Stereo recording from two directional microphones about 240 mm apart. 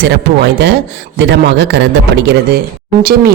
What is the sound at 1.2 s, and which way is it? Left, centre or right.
A man's voice, right.